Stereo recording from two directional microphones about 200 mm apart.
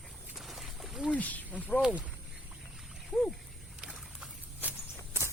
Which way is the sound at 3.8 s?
Centre (ahead or behind).